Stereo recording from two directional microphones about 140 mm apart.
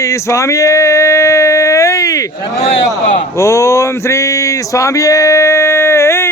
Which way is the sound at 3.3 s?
20° left (ahead or behind).